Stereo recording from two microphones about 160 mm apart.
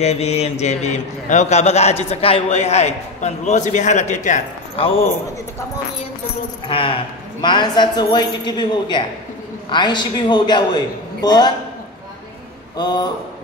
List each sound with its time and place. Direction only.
0.0 s a man's voice: 40° left (ahead or behind)
4.7 s speech: 35° left (ahead or behind)
6.7 s a woman's voice: 35° left (ahead or behind)
12.7 s a woman's voice: 25° left (ahead or behind)